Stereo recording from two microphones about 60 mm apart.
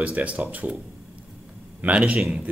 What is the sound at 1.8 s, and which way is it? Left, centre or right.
Speech, right.